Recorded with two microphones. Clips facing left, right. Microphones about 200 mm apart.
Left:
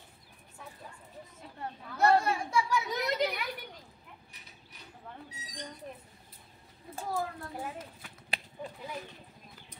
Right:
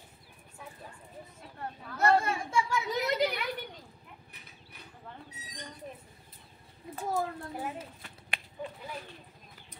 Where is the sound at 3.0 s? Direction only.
5° right (ahead or behind).